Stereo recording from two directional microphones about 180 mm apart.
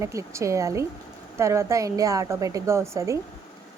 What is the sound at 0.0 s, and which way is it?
A woman's voice, 15° right (ahead or behind).